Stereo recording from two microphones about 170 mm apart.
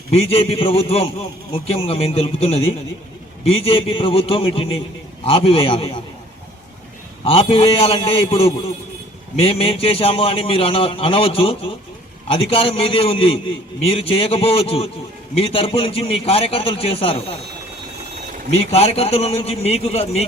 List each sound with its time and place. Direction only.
0.1 s a man's voice: 35° left (ahead or behind)
7.3 s a man's voice: 35° left (ahead or behind)
18.5 s a man's voice: 35° left (ahead or behind)